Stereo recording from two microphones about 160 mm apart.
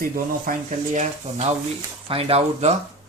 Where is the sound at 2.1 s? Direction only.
35° right (ahead or behind).